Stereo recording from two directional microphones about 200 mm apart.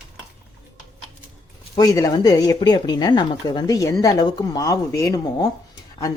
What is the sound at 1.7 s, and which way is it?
Speech, 15° left (ahead or behind).